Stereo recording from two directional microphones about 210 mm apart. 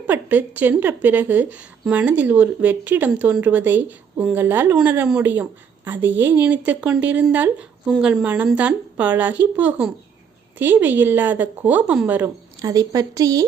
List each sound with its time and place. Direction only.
0.1 s a woman's voice: 10° right (ahead or behind)